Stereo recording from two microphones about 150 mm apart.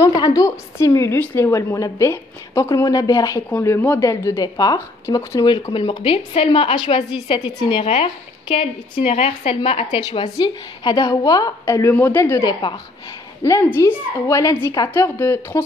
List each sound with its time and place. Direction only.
0.2 s a woman's voice: 25° left (ahead or behind); by 10.3 s 45° left (ahead or behind)
10.3 s a woman's voice: 30° left (ahead or behind)